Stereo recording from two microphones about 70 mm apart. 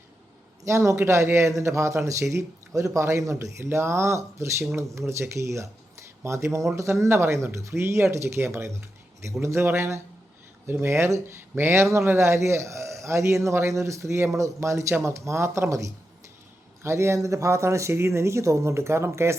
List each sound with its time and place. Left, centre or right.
0.6 s speech: right